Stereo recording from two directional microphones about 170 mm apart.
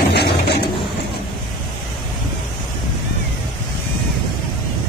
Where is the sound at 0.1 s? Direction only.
80° left.